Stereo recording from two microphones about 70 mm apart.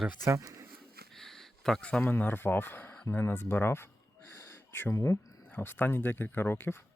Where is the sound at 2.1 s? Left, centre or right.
Left.